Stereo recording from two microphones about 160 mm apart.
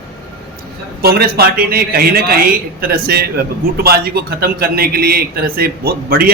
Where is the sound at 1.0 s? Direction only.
75° right (ahead or behind).